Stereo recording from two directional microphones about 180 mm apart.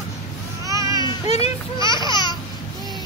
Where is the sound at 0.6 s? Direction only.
20° right (ahead or behind).